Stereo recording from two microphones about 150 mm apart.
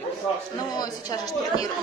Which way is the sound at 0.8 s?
25° left (ahead or behind).